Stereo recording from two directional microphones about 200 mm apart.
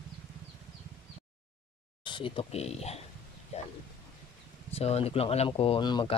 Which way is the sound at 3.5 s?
35° left (ahead or behind).